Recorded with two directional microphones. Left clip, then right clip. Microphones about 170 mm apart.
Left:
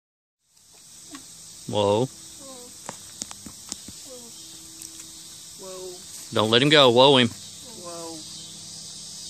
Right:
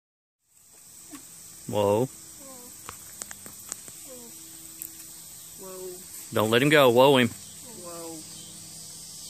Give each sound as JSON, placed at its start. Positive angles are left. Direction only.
{"t": 1.7, "sound": "speech", "side_deg": 5}
{"t": 6.3, "sound": "speech", "side_deg": 5}
{"t": 7.8, "sound": "a sound", "side_deg": -50}